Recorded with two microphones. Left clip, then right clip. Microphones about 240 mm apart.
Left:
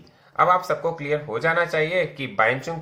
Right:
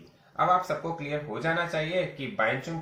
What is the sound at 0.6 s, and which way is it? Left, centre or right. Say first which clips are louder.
Speech: left 8 dB; left.